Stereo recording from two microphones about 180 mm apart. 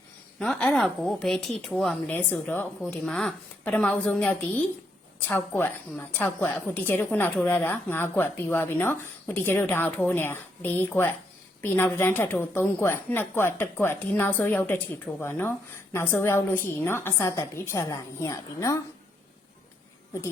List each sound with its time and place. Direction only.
0.3 s a woman's voice: 5° left (ahead or behind)